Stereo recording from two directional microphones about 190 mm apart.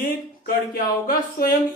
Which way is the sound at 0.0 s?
50° left (ahead or behind).